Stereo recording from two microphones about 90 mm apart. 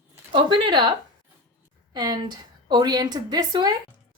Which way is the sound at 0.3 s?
65° right (ahead or behind).